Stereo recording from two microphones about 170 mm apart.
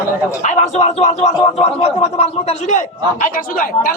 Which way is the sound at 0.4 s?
40° left (ahead or behind).